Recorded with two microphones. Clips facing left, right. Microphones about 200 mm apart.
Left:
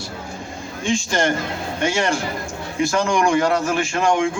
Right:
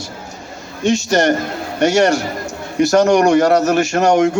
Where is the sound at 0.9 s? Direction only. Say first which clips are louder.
Right 5 dB; 40° right (ahead or behind).